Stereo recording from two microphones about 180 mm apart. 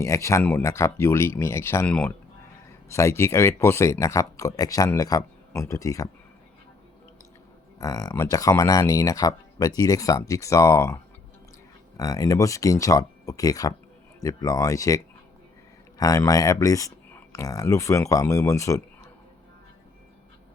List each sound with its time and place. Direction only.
0.0 s speech: 15° left (ahead or behind)
7.8 s speech: 20° left (ahead or behind)